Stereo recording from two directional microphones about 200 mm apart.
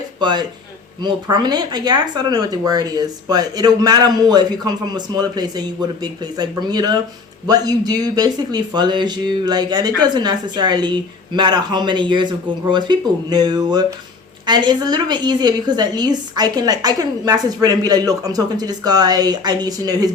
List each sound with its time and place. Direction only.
0.2 s speech: 20° right (ahead or behind)